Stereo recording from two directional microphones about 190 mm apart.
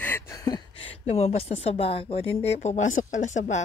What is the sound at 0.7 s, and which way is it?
Speech, 30° left (ahead or behind).